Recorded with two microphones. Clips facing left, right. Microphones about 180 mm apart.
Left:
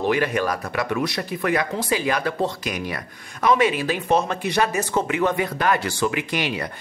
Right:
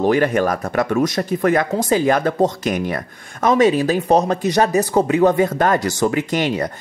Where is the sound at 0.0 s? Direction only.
45° right (ahead or behind).